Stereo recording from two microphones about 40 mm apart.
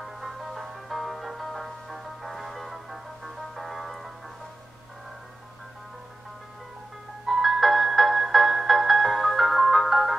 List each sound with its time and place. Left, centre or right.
0.0 s music: centre
7.2 s music: centre